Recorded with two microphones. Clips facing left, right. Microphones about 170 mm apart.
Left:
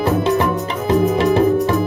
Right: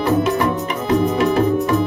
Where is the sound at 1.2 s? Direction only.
30° left (ahead or behind).